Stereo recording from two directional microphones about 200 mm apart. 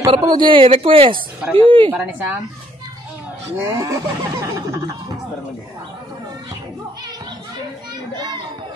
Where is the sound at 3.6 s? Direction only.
15° right (ahead or behind).